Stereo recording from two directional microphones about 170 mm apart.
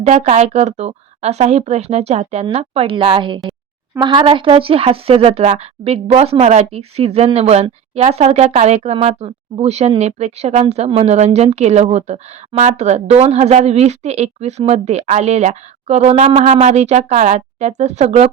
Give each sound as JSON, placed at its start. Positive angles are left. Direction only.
{"t": 0.0, "sound": "speech", "side_deg": -40}